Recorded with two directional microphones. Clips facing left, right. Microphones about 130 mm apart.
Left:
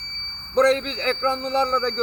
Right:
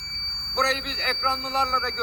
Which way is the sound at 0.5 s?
40° left (ahead or behind).